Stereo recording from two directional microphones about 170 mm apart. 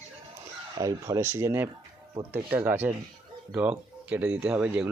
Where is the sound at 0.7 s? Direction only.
20° right (ahead or behind).